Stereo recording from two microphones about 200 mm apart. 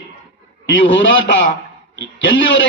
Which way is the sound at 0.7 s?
70° left (ahead or behind).